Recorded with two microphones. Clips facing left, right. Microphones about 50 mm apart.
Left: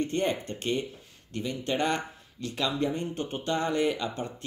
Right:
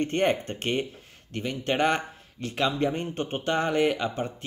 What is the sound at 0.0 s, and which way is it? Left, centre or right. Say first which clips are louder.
Speech: right 4 dB; right.